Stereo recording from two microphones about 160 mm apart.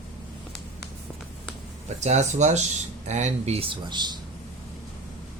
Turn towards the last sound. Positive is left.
turn(degrees=-25)  # may be behind; listen again after turning